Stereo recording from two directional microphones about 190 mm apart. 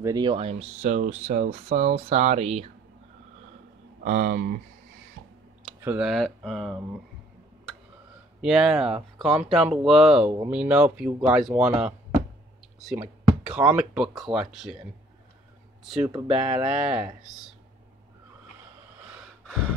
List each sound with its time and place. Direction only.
0.0 s speech: 20° right (ahead or behind)
4.0 s speech: 45° right (ahead or behind)
5.9 s speech: 5° right (ahead or behind)
8.4 s speech: 5° right (ahead or behind)
15.8 s speech: centre (ahead or behind)
19.4 s gasp: 5° right (ahead or behind)